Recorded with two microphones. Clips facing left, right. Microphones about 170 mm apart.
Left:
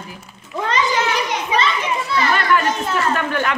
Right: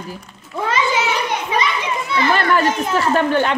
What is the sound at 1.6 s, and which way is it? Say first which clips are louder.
Children playing: left 1 dB; 15° right (ahead or behind).